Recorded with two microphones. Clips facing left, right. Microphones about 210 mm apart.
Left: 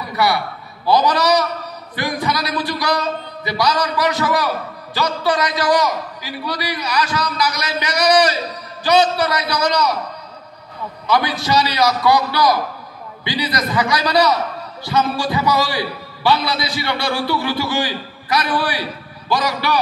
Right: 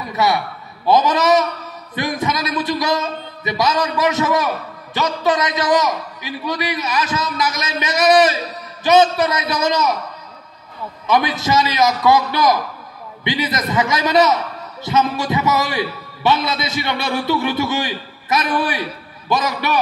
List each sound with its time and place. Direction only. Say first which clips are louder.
0.1 s a sound: right 1 dB; 20° right (ahead or behind)
0.8 s a man's voice: right 1 dB; 20° right (ahead or behind)
11.1 s a man's voice: right 1 dB; 20° right (ahead or behind)